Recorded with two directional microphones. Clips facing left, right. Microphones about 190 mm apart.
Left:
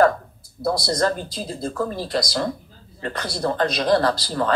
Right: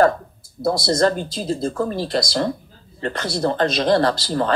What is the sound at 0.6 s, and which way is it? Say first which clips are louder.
Speech: right 3 dB; 25° right (ahead or behind).